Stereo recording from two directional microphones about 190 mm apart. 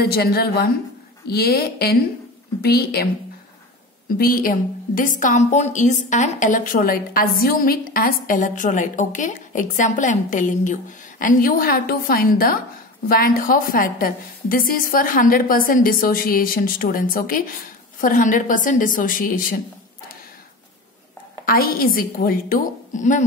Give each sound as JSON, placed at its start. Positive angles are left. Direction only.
{"t": 0.0, "sound": "a woman's voice", "side_deg": 55}
{"t": 4.2, "sound": "a woman's voice", "side_deg": 50}
{"t": 21.5, "sound": "a woman's voice", "side_deg": 50}